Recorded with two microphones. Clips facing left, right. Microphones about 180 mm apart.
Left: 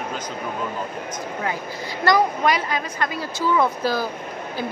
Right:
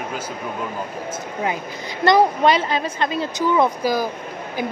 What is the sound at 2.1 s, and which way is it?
A woman's voice, 25° right (ahead or behind).